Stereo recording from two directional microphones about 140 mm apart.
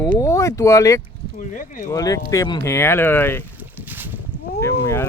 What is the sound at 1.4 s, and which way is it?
Speech, 65° left (ahead or behind).